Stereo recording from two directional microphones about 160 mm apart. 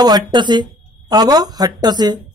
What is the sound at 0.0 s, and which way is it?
A woman's voice, 25° right (ahead or behind).